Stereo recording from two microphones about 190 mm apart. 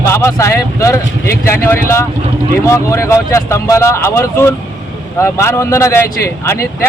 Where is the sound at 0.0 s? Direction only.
15° left (ahead or behind).